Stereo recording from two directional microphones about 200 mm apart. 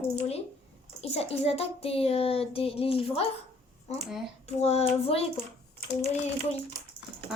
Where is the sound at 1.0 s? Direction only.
30° left (ahead or behind).